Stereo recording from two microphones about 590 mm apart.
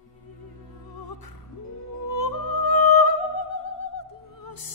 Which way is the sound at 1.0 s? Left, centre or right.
Left.